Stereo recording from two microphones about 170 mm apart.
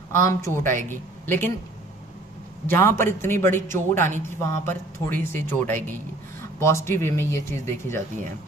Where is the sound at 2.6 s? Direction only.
15° left (ahead or behind).